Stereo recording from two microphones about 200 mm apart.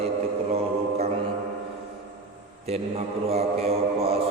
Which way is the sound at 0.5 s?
30° right (ahead or behind).